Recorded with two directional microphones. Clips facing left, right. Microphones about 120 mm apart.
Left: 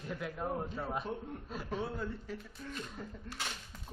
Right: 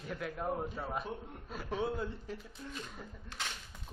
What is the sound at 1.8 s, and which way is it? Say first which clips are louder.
Speech: right 6 dB; 20° right (ahead or behind).